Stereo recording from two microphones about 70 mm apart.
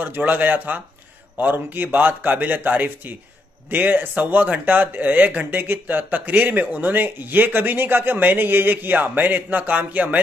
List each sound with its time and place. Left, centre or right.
0.0 s speech: right